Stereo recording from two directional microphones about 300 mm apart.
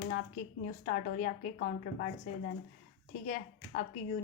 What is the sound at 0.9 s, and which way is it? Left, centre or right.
A woman's voice, left.